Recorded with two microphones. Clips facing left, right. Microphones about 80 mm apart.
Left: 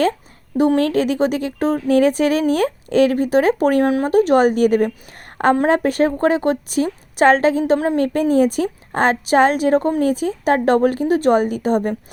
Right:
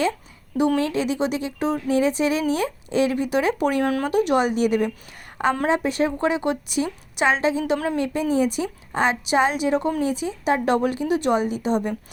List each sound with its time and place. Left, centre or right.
0.8 s speech: left
3.8 s speech: left